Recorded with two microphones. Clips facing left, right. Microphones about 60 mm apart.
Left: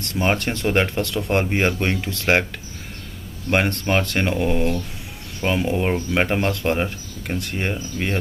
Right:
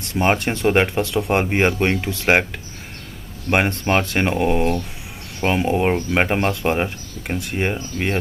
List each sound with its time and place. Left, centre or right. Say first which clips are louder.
0.0 s speech: right 3 dB; centre
3.4 s speech: right 2 dB; right